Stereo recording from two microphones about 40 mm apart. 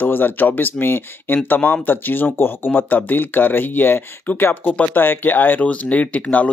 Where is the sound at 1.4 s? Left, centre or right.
Left.